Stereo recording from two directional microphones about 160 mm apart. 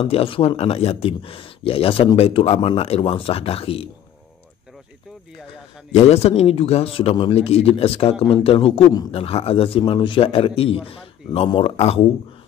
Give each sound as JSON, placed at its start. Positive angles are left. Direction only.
{"t": 0.0, "sound": "a man's voice", "side_deg": 35}
{"t": 5.9, "sound": "a man's voice", "side_deg": 40}